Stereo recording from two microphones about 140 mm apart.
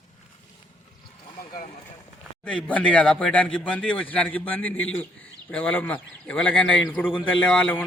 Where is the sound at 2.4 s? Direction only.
10° left (ahead or behind).